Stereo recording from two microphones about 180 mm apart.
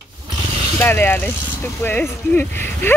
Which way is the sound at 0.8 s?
10° left (ahead or behind).